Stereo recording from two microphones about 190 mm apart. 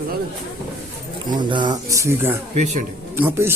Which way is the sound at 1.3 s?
25° right (ahead or behind).